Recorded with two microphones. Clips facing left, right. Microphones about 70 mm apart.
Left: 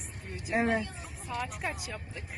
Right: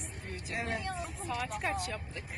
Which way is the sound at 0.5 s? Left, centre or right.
Left.